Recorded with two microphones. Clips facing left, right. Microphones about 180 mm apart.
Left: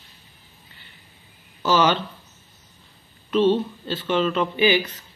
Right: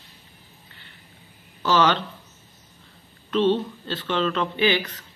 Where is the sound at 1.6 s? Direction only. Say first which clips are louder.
Left 1 dB; 10° left (ahead or behind).